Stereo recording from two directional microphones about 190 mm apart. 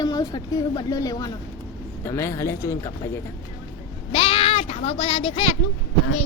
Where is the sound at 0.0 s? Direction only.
20° left (ahead or behind).